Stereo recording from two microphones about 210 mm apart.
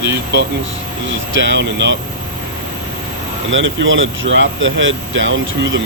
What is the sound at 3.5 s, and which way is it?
Speech, 65° right (ahead or behind).